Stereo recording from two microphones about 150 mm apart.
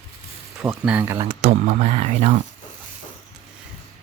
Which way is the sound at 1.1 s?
30° right (ahead or behind).